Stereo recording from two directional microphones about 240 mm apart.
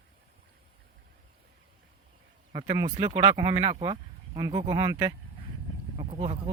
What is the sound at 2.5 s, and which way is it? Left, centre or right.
Speech, centre.